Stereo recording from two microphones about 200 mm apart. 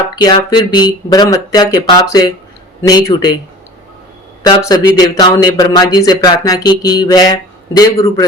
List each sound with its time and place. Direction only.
0.2 s speech: 20° left (ahead or behind)
4.4 s speech: 20° left (ahead or behind)